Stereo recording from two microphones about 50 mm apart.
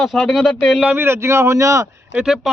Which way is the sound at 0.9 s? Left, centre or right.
Right.